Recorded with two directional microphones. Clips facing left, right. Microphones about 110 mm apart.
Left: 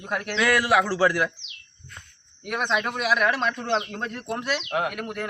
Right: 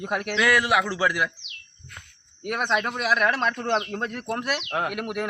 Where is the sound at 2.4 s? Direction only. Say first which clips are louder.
Right 1 dB; centre (ahead or behind).